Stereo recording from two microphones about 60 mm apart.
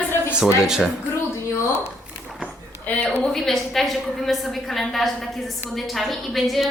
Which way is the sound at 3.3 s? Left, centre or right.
Centre.